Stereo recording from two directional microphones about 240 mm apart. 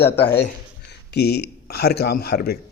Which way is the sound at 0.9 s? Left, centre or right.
Left.